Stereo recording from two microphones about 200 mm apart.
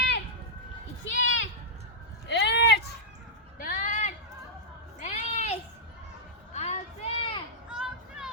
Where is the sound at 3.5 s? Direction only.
45° left (ahead or behind).